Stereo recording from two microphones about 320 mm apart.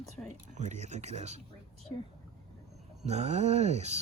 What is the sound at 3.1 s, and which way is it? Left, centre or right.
Speech, centre.